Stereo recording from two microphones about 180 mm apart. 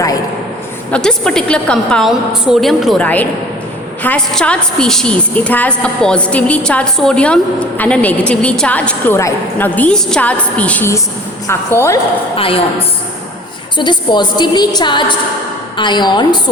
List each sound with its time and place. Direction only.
0.9 s a woman's voice: 5° left (ahead or behind)
12.4 s a woman's voice: 30° left (ahead or behind)
13.7 s a woman's voice: 25° left (ahead or behind)